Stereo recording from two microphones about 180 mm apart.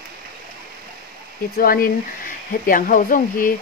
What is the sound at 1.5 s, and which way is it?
Speech, 55° left (ahead or behind).